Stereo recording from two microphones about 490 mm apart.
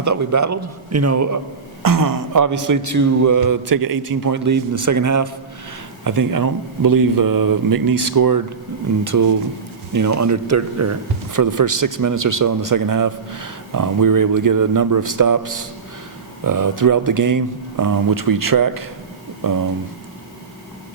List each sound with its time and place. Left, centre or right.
0.0 s a man's voice: right